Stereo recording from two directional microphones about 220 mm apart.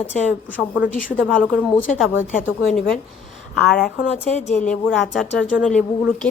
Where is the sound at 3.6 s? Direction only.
Centre (ahead or behind).